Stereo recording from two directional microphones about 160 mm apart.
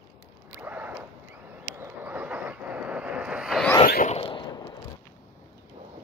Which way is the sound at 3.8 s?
60° left (ahead or behind).